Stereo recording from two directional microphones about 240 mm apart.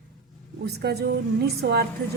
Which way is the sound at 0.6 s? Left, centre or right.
Right.